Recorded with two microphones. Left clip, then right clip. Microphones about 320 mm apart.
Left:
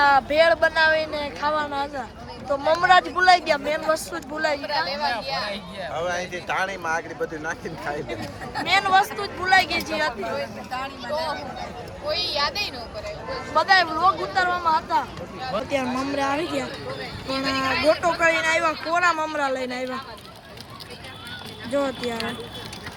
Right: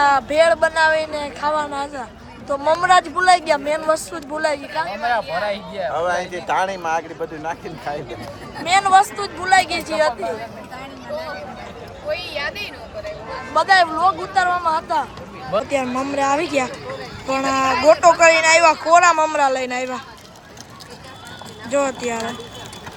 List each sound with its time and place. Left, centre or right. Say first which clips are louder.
0.0 s speech: right 2 dB; centre
4.9 s speech: right 5 dB; right
8.6 s speech: right 5 dB; centre
12.0 s speech: even; centre
21.7 s speech: right 5 dB; centre